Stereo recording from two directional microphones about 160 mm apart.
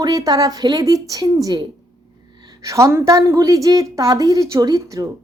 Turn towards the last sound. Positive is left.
turn(degrees=-20)  # may be behind; listen again after turning